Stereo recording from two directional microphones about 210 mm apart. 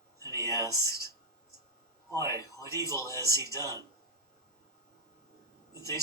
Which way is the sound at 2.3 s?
15° left (ahead or behind).